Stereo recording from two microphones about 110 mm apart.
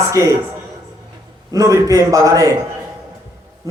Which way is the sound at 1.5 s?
30° right (ahead or behind).